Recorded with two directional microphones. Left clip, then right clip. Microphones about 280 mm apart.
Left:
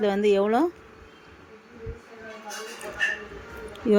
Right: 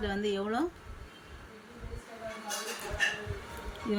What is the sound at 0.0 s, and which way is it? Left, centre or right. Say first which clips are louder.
Speech: left 11 dB; centre.